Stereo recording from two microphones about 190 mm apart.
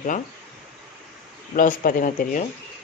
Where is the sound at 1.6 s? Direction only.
45° left (ahead or behind).